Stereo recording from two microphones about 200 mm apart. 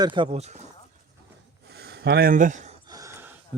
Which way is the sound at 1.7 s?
55° right (ahead or behind).